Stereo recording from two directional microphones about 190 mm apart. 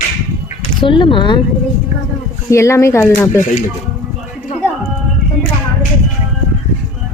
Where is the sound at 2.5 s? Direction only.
15° left (ahead or behind).